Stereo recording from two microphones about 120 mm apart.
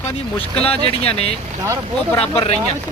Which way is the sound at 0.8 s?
55° left (ahead or behind).